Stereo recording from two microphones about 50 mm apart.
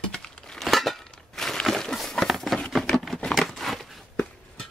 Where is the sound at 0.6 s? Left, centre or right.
Centre.